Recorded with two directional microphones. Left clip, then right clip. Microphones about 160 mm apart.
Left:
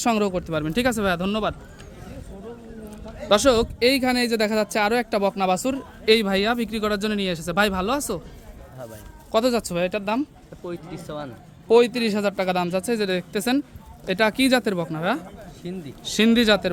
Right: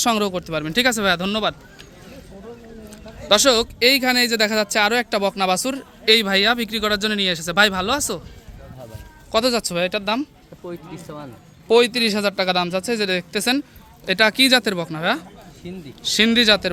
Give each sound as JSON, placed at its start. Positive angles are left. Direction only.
{"t": 0.0, "sound": "speech", "side_deg": 5}
{"t": 2.9, "sound": "speech", "side_deg": 5}
{"t": 9.3, "sound": "speech", "side_deg": 0}
{"t": 10.7, "sound": "speech", "side_deg": -35}
{"t": 11.7, "sound": "a man's voice", "side_deg": -5}